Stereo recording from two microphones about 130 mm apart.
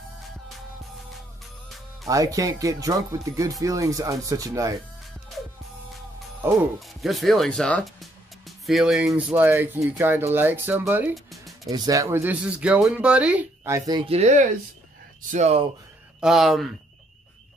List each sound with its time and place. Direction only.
2.0 s speech: 25° right (ahead or behind)
6.4 s speech: 15° right (ahead or behind)
6.8 s speech: centre (ahead or behind)
11.2 s music: centre (ahead or behind)
11.7 s speech: 30° right (ahead or behind); by 13.5 s 10° right (ahead or behind)
13.7 s speech: 30° right (ahead or behind)
14.0 s speech: 55° right (ahead or behind)
16.2 s speech: 5° right (ahead or behind)